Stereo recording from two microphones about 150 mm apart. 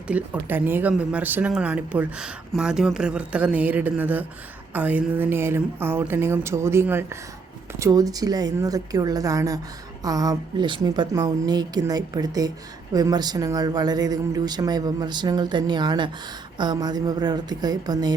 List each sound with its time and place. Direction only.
0.1 s a woman's voice: 10° right (ahead or behind); by 18.1 s 25° right (ahead or behind)